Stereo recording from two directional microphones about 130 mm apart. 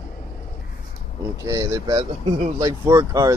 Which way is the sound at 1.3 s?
25° right (ahead or behind).